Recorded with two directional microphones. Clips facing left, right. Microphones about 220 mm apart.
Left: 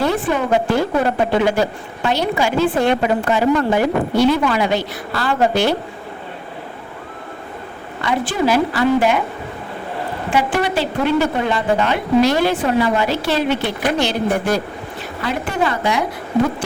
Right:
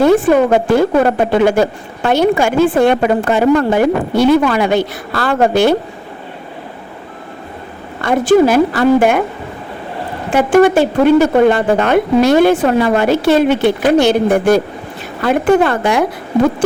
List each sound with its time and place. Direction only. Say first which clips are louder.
0.0 s a woman's voice: right 9 dB; 50° right (ahead or behind)
8.0 s a woman's voice: right 9 dB; 45° right (ahead or behind)
10.3 s a woman's voice: right 10 dB; 50° right (ahead or behind)